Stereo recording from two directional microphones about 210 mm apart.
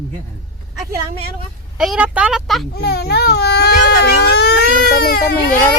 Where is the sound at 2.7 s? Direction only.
50° left (ahead or behind).